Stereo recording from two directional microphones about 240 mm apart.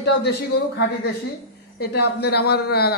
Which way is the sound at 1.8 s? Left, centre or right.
Left.